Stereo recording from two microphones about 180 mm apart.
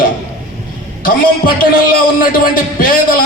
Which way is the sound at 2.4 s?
55° left (ahead or behind).